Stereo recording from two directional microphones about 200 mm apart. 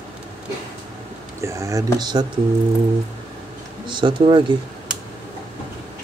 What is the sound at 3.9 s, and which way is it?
Speech, 25° right (ahead or behind).